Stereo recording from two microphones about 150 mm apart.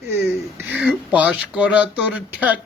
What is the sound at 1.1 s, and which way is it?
Speech, 10° right (ahead or behind).